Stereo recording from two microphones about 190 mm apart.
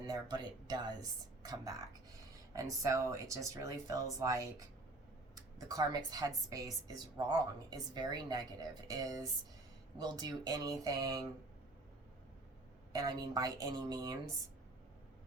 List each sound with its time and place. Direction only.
0.0 s a woman's voice: 20° right (ahead or behind)
12.9 s a woman's voice: 20° right (ahead or behind)